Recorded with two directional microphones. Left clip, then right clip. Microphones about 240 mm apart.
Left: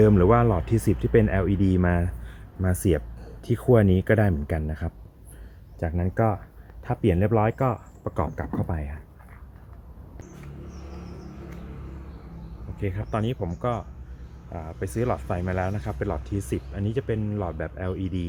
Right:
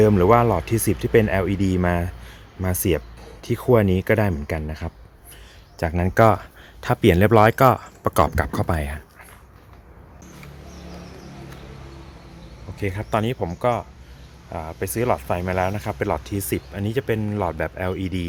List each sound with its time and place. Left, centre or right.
0.0 s speech: centre
5.8 s speech: right
12.8 s speech: right